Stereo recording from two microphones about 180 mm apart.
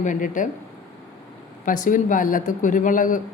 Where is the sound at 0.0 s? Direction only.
45° left (ahead or behind).